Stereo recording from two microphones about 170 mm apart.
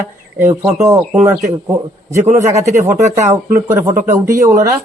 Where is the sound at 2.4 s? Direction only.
15° right (ahead or behind).